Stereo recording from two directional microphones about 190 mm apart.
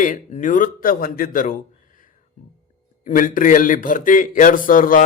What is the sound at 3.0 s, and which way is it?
Speech, 45° left (ahead or behind).